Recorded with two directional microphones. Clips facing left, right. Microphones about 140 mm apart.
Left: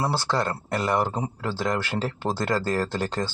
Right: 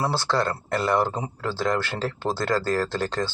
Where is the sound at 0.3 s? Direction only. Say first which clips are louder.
Right 1 dB; 5° left (ahead or behind).